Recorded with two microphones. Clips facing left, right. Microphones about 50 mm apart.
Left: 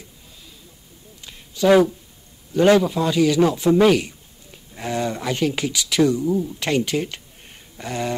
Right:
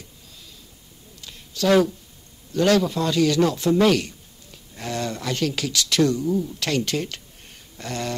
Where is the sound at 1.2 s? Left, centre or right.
Centre.